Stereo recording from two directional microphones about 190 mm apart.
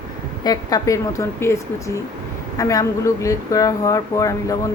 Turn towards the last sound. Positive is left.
turn(degrees=15)  # may be behind; listen again after turning